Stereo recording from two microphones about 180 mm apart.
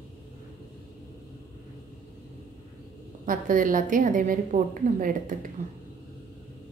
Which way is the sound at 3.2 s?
50° right (ahead or behind).